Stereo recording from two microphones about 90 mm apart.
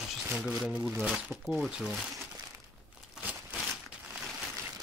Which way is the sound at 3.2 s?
20° right (ahead or behind).